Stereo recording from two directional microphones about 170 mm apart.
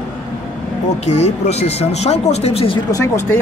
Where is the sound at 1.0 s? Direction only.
40° left (ahead or behind).